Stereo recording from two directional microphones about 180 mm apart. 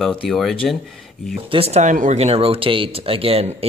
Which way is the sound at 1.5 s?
35° right (ahead or behind).